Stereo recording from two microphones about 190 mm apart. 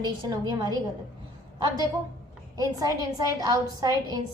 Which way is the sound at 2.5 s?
20° right (ahead or behind).